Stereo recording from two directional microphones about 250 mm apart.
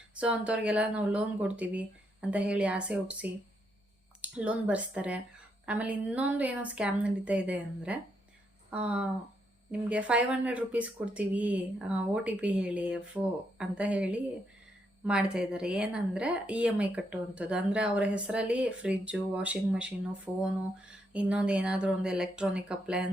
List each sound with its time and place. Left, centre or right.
0.1 s a woman's voice: centre